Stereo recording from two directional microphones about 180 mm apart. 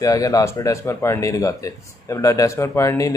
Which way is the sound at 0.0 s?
20° left (ahead or behind).